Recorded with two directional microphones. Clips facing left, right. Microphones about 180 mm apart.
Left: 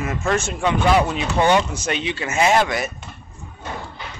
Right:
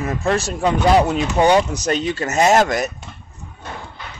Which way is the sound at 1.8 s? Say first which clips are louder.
Right 4 dB; 40° right (ahead or behind).